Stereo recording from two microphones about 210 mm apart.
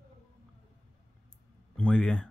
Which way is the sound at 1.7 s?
5° left (ahead or behind).